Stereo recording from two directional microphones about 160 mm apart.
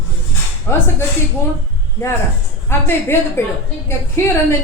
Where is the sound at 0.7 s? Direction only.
15° left (ahead or behind).